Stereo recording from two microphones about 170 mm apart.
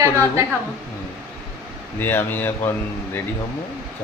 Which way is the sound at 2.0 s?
10° left (ahead or behind).